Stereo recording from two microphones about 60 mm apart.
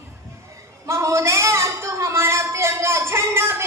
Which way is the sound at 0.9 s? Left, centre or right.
Right.